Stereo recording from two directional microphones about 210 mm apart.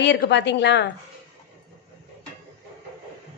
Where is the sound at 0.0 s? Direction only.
55° left (ahead or behind).